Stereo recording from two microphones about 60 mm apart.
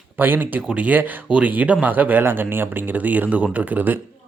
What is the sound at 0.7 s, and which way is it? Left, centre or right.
Speech, right.